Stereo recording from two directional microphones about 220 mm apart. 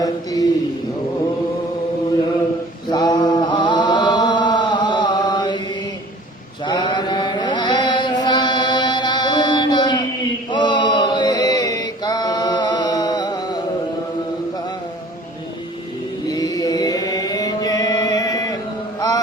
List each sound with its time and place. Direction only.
0.0 s a sound: 15° left (ahead or behind)
2.9 s chant: 15° left (ahead or behind)
6.7 s mantra: 20° left (ahead or behind)
10.5 s chant: 20° left (ahead or behind)
16.2 s chant: 15° left (ahead or behind)
18.9 s mantra: 15° left (ahead or behind)